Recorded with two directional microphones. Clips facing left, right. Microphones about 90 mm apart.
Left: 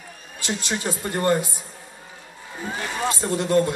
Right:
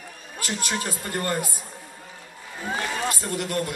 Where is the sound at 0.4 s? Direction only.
25° left (ahead or behind).